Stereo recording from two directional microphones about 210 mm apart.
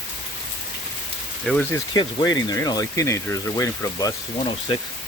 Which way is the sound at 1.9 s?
20° left (ahead or behind).